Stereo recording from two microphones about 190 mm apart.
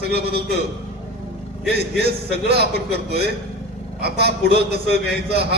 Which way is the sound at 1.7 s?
60° right (ahead or behind).